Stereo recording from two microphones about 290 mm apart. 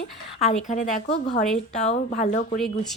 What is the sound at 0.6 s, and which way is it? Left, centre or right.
Speech, left.